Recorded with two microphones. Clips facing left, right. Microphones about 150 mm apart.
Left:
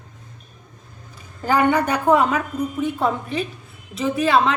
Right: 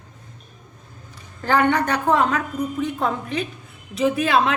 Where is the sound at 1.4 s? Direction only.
10° left (ahead or behind).